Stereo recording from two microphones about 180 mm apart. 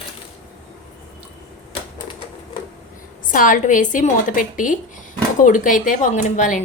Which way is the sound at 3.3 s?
50° left (ahead or behind).